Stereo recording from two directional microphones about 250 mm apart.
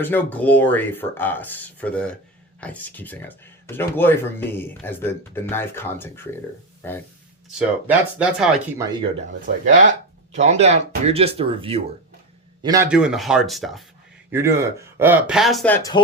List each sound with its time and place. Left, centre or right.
0.0 s speech: centre
7.9 s speech: centre
9.6 s speech: right; by 12.9 s centre
12.9 s speech: centre